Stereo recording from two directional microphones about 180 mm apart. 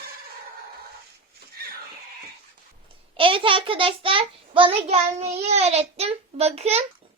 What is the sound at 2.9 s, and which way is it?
Child singing, 30° right (ahead or behind).